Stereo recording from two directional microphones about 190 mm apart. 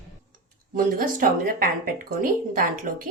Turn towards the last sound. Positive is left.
turn(degrees=-50)  # may be behind; listen again after turning